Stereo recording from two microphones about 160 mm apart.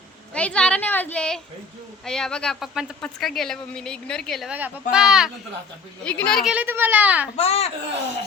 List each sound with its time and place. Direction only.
0.3 s a woman's voice: 5° left (ahead or behind)
4.5 s speech: 10° right (ahead or behind)
6.0 s a woman's voice: 5° left (ahead or behind)
6.5 s a child's voice: 10° right (ahead or behind)
7.3 s a child's voice: 40° left (ahead or behind)